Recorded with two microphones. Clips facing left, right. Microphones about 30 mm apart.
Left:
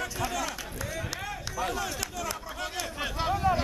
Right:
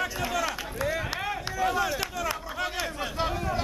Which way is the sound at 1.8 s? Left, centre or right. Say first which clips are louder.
Right 5 dB; centre.